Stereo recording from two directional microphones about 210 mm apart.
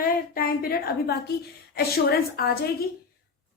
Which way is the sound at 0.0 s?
45° left (ahead or behind).